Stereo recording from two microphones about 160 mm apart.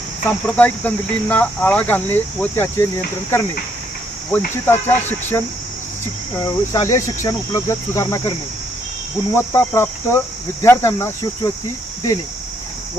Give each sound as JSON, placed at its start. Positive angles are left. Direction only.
{"t": 0.3, "sound": "cricket", "side_deg": 10}
{"t": 6.3, "sound": "speech", "side_deg": 20}
{"t": 9.3, "sound": "cricket", "side_deg": 15}